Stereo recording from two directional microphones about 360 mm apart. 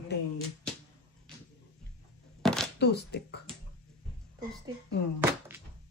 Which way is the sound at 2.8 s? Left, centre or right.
Left.